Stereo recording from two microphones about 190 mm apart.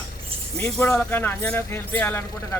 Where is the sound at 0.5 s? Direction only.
5° left (ahead or behind).